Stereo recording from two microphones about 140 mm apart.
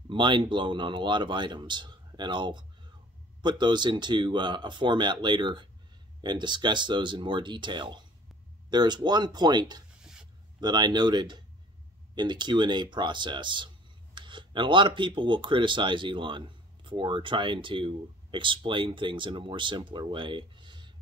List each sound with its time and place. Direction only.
0.1 s speech: 35° right (ahead or behind)